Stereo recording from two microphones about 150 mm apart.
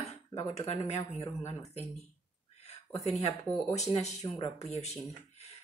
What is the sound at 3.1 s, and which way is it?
Speech, 45° left (ahead or behind).